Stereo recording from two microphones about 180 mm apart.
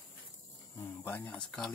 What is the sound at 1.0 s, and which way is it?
Speech, 10° left (ahead or behind).